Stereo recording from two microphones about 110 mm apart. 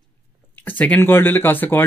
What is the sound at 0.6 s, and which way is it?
Speech, 15° left (ahead or behind).